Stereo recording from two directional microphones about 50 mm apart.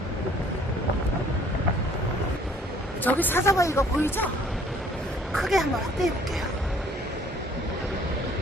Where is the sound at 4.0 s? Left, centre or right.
Left.